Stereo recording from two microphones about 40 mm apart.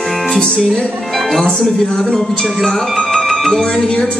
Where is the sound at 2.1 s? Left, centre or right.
Centre.